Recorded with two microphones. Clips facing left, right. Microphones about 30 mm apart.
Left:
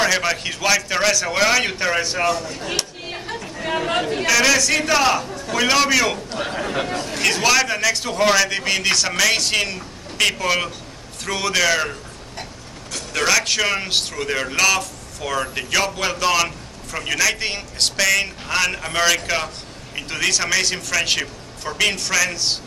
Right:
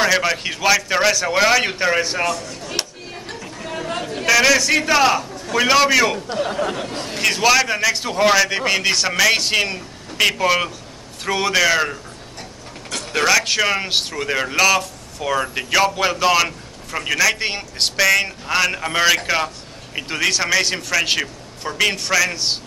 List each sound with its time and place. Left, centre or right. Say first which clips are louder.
0.0 s a man's voice: right 2 dB; centre
3.7 s a sound: left 5 dB; left
4.3 s a man's voice: right 3 dB; centre
7.2 s a man's voice: right 2 dB; centre
13.1 s a man's voice: right 2 dB; centre